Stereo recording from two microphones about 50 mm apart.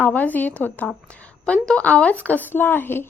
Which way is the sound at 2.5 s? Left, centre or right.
Left.